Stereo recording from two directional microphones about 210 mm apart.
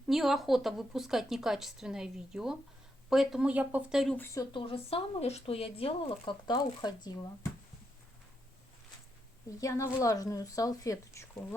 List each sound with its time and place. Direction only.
0.1 s speech: centre (ahead or behind)
4.4 s speech: 25° left (ahead or behind)
9.5 s speech: 15° left (ahead or behind)